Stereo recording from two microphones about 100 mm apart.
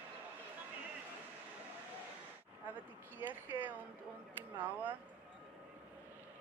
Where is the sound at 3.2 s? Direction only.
20° right (ahead or behind).